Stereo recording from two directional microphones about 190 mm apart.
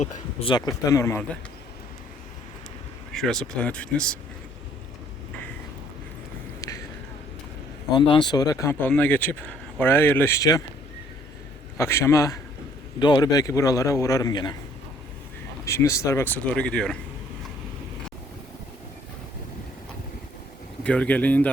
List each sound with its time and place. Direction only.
0.0 s a man's voice: 35° left (ahead or behind); by 1.4 s 15° left (ahead or behind)
3.1 s speech: centre (ahead or behind)
7.9 s a man's voice: 25° left (ahead or behind)
11.8 s a man's voice: 15° left (ahead or behind)
15.6 s speech: 15° left (ahead or behind)
20.8 s speech: 5° left (ahead or behind)